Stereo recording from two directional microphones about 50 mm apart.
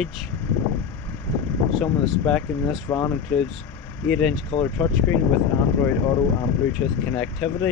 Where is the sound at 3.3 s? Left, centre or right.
Left.